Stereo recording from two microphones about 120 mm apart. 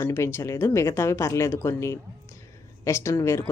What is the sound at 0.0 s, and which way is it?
Speech, 20° left (ahead or behind).